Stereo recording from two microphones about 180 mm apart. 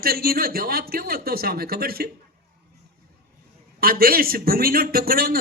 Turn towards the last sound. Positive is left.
turn(degrees=-55)  # may be behind; listen again after turning